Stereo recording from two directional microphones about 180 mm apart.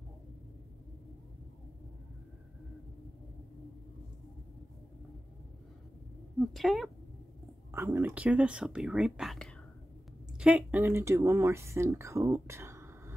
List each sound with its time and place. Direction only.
6.4 s speech: centre (ahead or behind)
7.7 s speech: 15° right (ahead or behind)